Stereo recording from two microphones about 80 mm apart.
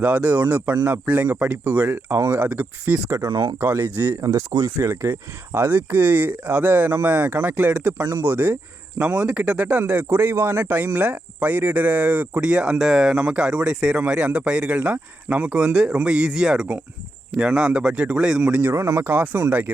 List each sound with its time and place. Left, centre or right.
0.0 s speech: centre
2.1 s speech: right
2.4 s speech: right
4.2 s speech: right
5.5 s speech: right
18.4 s speech: right
18.7 s speech: right